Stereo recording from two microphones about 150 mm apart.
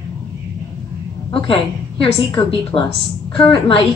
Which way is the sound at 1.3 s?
35° left (ahead or behind).